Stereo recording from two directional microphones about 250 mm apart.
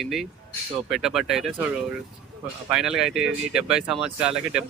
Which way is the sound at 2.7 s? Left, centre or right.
Centre.